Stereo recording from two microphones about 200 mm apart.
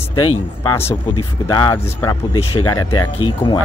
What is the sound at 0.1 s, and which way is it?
Speech, 90° left.